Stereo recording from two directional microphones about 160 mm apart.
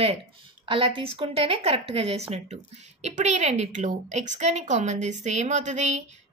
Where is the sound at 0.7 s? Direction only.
35° right (ahead or behind).